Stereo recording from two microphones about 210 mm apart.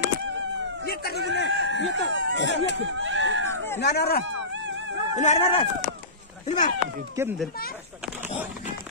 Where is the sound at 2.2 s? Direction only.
55° left (ahead or behind).